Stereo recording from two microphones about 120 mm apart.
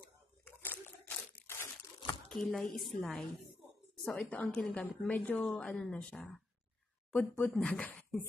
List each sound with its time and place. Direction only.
0.5 s crunch: 15° left (ahead or behind)
2.2 s speech: 5° left (ahead or behind)
4.2 s a woman's voice: 15° left (ahead or behind)